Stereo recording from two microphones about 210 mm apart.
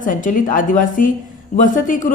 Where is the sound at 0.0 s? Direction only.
40° left (ahead or behind).